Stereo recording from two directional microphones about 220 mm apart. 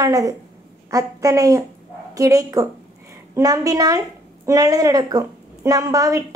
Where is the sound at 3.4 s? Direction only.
15° right (ahead or behind).